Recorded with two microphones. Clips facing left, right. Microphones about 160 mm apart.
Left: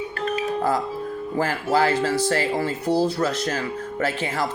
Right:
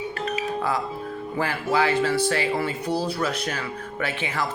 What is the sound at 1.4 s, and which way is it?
Speech, 40° left (ahead or behind).